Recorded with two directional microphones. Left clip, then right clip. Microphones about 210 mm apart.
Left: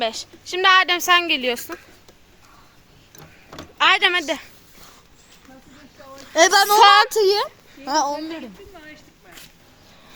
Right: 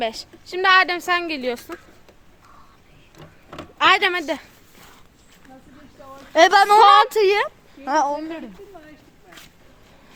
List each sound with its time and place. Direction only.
0.0 s a woman's voice: 5° right (ahead or behind)
3.8 s speech: 5° right (ahead or behind)
6.3 s a child's voice: 25° right (ahead or behind)
6.7 s a woman's voice: centre (ahead or behind)
7.1 s speech: 15° right (ahead or behind); by 8.4 s centre (ahead or behind)